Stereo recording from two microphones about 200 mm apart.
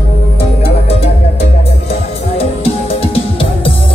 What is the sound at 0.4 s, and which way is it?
Music, 30° left (ahead or behind).